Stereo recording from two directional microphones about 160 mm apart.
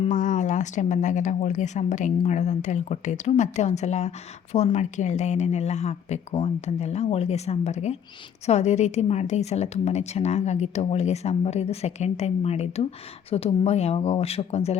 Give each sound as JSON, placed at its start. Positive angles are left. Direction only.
{"t": 0.1, "sound": "a woman's voice", "side_deg": 50}